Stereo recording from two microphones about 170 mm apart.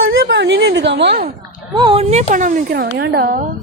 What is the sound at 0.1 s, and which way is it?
Speech, 85° right.